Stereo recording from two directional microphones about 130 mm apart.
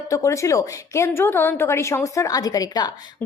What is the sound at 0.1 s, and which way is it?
A woman's voice, 25° left (ahead or behind).